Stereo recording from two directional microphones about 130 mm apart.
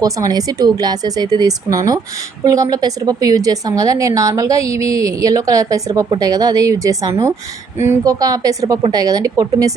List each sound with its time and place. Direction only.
0.0 s a woman's voice: 30° right (ahead or behind)